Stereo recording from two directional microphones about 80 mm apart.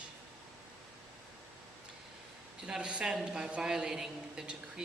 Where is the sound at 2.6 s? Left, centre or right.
Centre.